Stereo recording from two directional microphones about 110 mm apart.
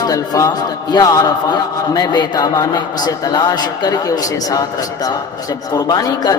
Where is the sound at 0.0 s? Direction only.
35° left (ahead or behind).